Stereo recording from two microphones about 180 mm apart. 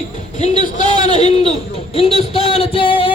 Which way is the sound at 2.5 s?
30° left (ahead or behind).